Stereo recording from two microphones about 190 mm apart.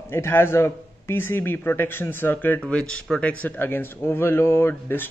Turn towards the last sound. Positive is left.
turn(degrees=10)  # may be behind; listen again after turning